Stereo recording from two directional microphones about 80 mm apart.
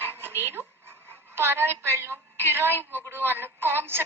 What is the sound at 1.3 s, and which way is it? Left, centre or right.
A woman's voice, right.